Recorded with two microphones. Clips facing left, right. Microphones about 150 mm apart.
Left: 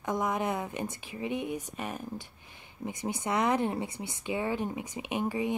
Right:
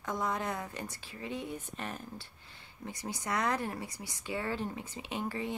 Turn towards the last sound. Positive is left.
turn(degrees=15)  # may be behind; listen again after turning